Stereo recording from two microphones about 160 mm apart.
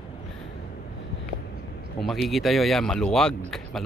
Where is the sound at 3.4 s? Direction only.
Centre (ahead or behind).